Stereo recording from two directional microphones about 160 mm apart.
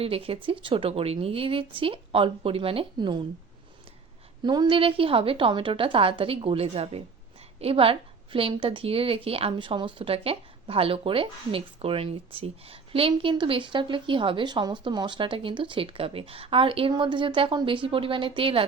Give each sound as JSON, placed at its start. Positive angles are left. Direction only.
{"t": 0.0, "sound": "a woman's voice", "side_deg": -35}
{"t": 4.4, "sound": "a woman's voice", "side_deg": -25}